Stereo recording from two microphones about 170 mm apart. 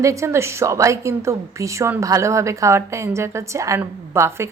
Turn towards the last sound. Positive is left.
turn(degrees=-15)  # may be behind; listen again after turning